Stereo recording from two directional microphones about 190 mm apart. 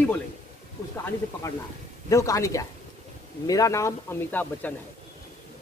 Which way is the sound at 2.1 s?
15° left (ahead or behind).